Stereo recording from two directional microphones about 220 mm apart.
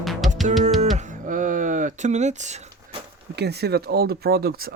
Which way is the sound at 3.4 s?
50° right (ahead or behind).